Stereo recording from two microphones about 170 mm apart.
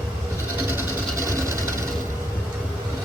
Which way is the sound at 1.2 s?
20° right (ahead or behind).